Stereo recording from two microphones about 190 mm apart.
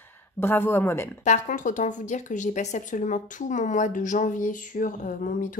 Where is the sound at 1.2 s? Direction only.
40° left (ahead or behind).